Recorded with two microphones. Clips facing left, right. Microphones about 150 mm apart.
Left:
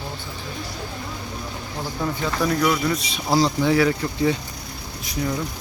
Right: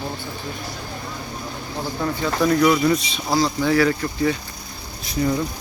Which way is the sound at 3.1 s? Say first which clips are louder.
Left 1 dB; 10° left (ahead or behind).